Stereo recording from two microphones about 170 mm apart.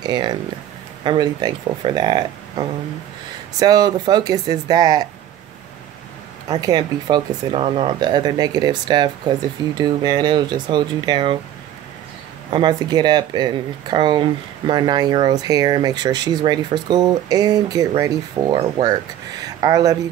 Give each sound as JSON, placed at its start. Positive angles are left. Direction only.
{"t": 0.0, "sound": "speech", "side_deg": -25}
{"t": 6.5, "sound": "speech", "side_deg": -25}
{"t": 12.4, "sound": "speech", "side_deg": -25}